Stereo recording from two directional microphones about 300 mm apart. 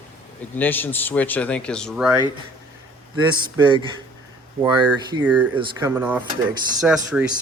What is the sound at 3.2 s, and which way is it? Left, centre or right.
Speech, centre.